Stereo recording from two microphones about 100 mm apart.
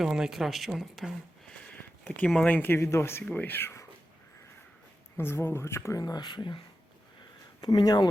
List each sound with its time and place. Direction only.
0.0 s speech: 5° right (ahead or behind)
1.5 s a sound: 15° left (ahead or behind)
2.5 s speech: 20° left (ahead or behind)
5.1 s speech: 25° left (ahead or behind)
6.0 s speech: 40° left (ahead or behind)
7.6 s speech: 40° left (ahead or behind)